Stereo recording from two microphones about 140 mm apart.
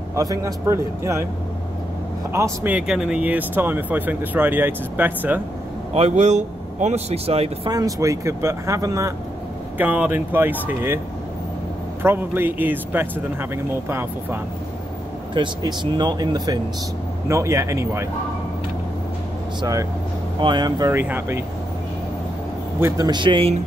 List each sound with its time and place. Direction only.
0.1 s speech: 25° right (ahead or behind)
2.3 s speech: 20° right (ahead or behind)
2.7 s speech: 5° right (ahead or behind)
5.9 s speech: 55° right (ahead or behind)
7.7 s speech: 25° right (ahead or behind)
9.8 s speech: 10° right (ahead or behind)
12.0 s speech: 15° right (ahead or behind)
15.3 s speech: 35° right (ahead or behind)
19.6 s speech: 25° right (ahead or behind)
20.9 s speech: 15° right (ahead or behind)
22.8 s speech: 20° right (ahead or behind)